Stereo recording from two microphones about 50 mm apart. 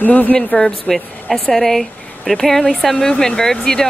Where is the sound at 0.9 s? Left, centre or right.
Centre.